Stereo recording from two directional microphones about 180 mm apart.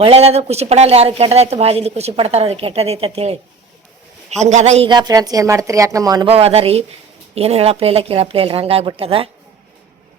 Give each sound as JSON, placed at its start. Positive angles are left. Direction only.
{"t": 0.0, "sound": "speech", "side_deg": -35}
{"t": 4.9, "sound": "a woman's voice", "side_deg": -20}
{"t": 6.2, "sound": "speech", "side_deg": -35}